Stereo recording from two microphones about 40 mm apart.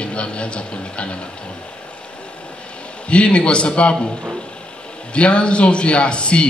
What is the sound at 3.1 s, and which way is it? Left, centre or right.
Speech, left.